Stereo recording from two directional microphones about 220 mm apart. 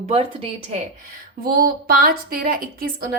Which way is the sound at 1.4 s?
40° right (ahead or behind).